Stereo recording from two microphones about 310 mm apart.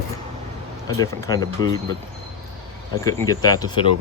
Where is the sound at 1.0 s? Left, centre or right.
Centre.